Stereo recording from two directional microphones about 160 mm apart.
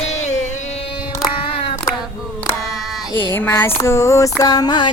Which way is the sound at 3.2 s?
15° left (ahead or behind).